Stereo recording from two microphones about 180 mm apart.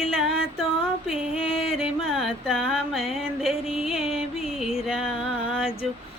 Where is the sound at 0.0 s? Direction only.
5° right (ahead or behind).